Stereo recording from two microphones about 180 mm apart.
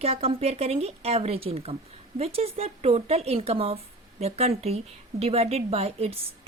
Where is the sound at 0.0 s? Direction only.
35° right (ahead or behind).